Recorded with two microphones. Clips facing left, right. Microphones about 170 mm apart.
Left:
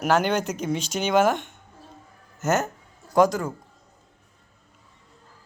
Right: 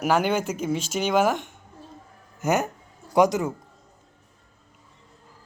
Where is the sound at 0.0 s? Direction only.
5° right (ahead or behind).